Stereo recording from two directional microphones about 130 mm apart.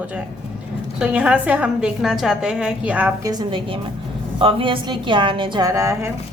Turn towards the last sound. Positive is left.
turn(degrees=-25)  # may be behind; listen again after turning